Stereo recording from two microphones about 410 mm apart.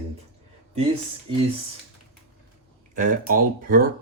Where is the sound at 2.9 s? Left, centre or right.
Centre.